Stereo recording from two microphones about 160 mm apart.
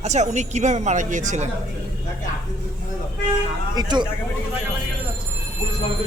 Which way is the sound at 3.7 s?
25° right (ahead or behind).